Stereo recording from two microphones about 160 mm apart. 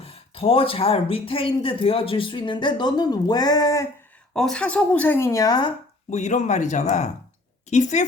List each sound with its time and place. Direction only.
0.0 s speech: 35° left (ahead or behind); by 3.8 s 20° left (ahead or behind)
4.4 s speech: 5° left (ahead or behind); by 5.7 s 25° left (ahead or behind)
6.1 s speech: 45° left (ahead or behind)